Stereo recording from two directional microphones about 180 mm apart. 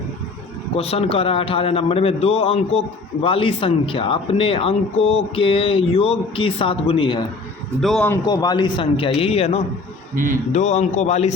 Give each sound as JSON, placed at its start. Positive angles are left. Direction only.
{"t": 0.8, "sound": "a man's voice", "side_deg": 35}
{"t": 7.8, "sound": "a man's voice", "side_deg": 0}
{"t": 8.1, "sound": "a man's voice", "side_deg": 20}